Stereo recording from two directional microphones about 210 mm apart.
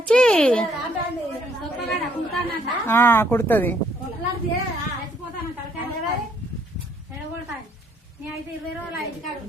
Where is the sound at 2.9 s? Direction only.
10° left (ahead or behind).